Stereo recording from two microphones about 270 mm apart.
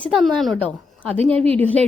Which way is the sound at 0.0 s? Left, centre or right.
Centre.